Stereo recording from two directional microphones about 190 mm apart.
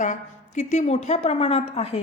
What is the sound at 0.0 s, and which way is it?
A woman's voice, 40° left (ahead or behind).